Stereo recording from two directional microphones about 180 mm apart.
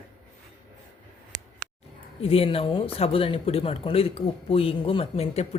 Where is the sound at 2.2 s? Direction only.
30° left (ahead or behind).